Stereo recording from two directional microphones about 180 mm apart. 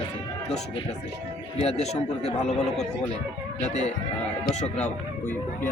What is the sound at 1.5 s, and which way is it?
A man's voice, 35° left (ahead or behind).